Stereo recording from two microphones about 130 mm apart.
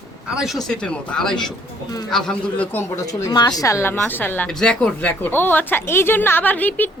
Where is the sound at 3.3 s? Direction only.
30° left (ahead or behind).